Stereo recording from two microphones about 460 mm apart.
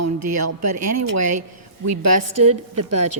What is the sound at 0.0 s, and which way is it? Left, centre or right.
A woman's voice, right.